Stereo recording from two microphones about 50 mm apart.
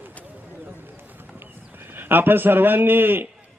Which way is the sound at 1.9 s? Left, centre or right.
Right.